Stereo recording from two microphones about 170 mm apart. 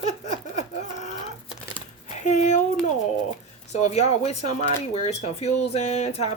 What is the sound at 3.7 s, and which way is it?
A woman's voice, 40° left (ahead or behind).